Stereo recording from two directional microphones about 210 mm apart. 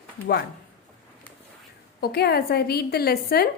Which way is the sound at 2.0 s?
50° left (ahead or behind).